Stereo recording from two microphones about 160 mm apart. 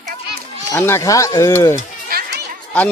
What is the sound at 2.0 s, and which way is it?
Music, 70° right (ahead or behind).